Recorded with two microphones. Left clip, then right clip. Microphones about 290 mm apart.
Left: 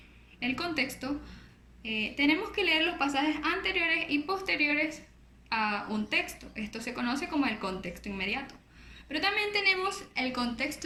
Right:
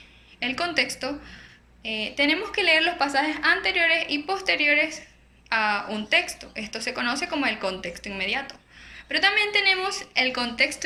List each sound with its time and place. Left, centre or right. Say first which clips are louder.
0.3 s a woman's voice: right 7 dB; centre